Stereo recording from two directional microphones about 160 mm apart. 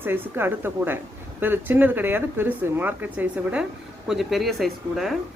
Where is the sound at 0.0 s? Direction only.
15° right (ahead or behind).